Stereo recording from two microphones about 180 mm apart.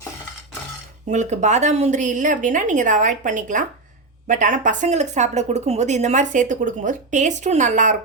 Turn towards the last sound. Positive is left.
turn(degrees=-45)  # may be behind; listen again after turning